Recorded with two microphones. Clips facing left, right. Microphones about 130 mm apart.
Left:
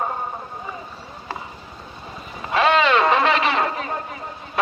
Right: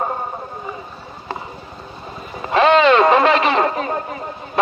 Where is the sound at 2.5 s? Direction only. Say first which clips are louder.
Right 5 dB; 5° left (ahead or behind).